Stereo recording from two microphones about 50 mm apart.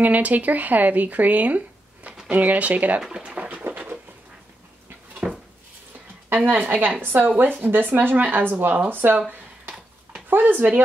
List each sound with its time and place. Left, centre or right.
0.0 s speech: right
3.1 s a sound: right
5.2 s dishes: centre
6.3 s speech: right
10.3 s speech: right